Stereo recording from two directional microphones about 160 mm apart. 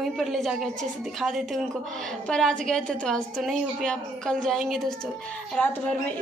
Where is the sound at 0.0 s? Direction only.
Centre (ahead or behind).